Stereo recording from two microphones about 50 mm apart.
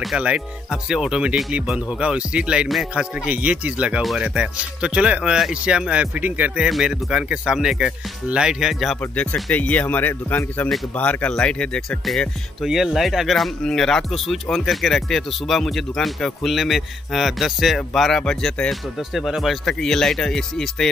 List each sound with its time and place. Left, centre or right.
0.1 s speech: centre
5.9 s speech: right
6.7 s speech: centre
7.8 s speech: centre
9.0 s speech: left
11.0 s speech: left
12.6 s speech: centre
14.1 s speech: centre
18.2 s speech: centre
18.7 s speech: centre
19.6 s speech: centre